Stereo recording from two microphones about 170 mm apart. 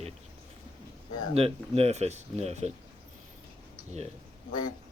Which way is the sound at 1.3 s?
35° right (ahead or behind).